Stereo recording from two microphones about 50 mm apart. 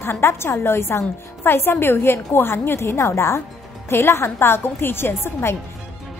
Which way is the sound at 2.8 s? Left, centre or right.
Left.